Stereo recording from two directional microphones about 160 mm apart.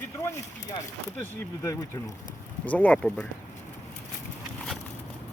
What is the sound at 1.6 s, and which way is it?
Speech, 20° left (ahead or behind).